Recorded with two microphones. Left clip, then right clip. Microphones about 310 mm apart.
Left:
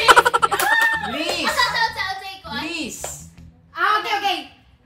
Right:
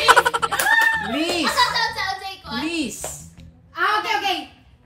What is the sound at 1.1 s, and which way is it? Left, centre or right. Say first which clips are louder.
Speech: right 1 dB; centre.